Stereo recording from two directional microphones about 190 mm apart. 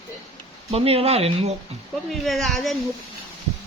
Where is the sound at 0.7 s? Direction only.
30° right (ahead or behind).